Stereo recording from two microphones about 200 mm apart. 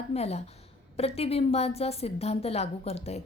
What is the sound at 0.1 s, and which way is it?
A woman's voice, 30° left (ahead or behind).